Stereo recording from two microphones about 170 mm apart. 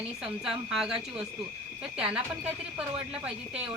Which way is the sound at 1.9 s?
5° right (ahead or behind).